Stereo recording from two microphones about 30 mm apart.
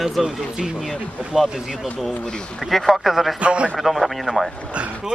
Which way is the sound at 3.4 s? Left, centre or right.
Right.